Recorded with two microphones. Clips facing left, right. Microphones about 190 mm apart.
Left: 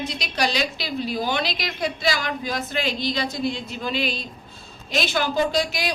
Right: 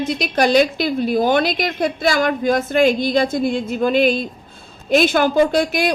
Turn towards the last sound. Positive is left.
turn(degrees=-55)  # may be behind; listen again after turning